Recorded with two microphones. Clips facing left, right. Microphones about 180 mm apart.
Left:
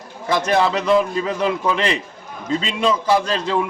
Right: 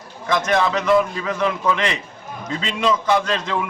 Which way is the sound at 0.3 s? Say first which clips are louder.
Left 1 dB; 30° left (ahead or behind).